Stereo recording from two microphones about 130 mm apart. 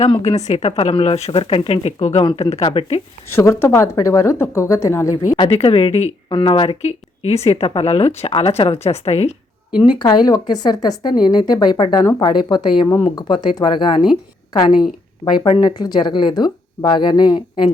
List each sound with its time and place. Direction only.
0.2 s a woman's voice: 55° left (ahead or behind)
2.2 s a woman's voice: 45° left (ahead or behind)
3.3 s speech: 20° left (ahead or behind)
5.4 s a woman's voice: 50° left (ahead or behind)
6.2 s a woman's voice: 40° left (ahead or behind)
9.8 s speech: 35° left (ahead or behind)